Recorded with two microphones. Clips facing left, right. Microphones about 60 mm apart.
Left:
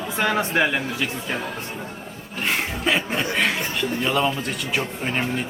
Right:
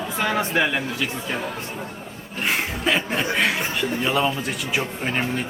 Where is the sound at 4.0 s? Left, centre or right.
Centre.